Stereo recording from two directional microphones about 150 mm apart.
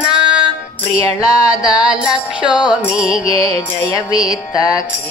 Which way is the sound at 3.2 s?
20° left (ahead or behind).